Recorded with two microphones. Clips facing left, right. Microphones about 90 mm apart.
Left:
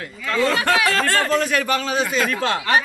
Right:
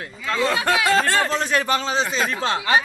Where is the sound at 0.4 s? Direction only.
20° right (ahead or behind).